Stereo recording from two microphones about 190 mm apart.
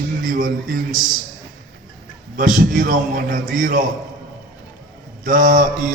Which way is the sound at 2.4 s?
45° right (ahead or behind).